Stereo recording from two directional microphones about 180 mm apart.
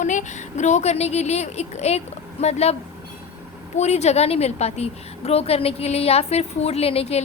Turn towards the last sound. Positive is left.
turn(degrees=35)  # may be behind; listen again after turning